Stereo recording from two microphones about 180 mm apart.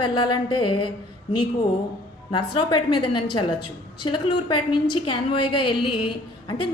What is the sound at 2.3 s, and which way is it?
A woman's voice, 25° left (ahead or behind).